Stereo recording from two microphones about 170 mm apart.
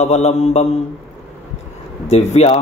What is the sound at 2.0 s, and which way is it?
Mantra, 40° left (ahead or behind).